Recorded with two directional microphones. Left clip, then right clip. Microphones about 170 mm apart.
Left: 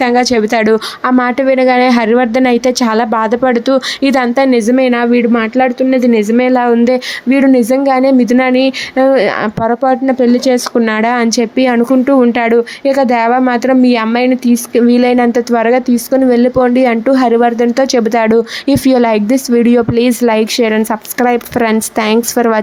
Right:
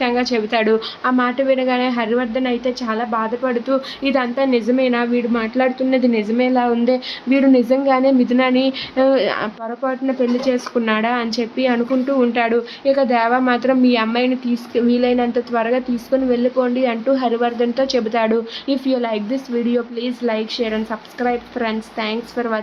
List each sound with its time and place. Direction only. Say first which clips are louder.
0.0 s speech: left 8 dB; 40° left (ahead or behind)